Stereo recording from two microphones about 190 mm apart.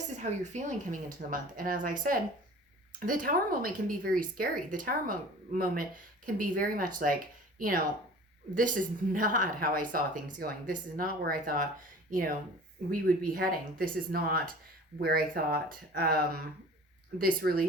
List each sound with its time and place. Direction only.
0.2 s a woman's voice: 40° right (ahead or behind)
8.5 s a woman's voice: 45° right (ahead or behind)